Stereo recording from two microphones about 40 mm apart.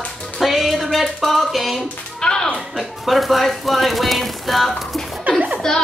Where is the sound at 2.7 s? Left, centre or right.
Centre.